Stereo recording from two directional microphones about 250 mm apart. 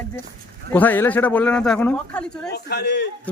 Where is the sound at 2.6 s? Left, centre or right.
Left.